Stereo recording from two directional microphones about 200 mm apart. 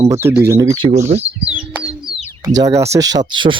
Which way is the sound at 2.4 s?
20° right (ahead or behind).